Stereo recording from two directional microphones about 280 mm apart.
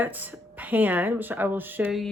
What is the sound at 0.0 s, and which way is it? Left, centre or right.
Speech, centre.